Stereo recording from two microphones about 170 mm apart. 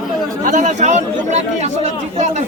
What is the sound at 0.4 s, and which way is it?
Speech, 45° right (ahead or behind).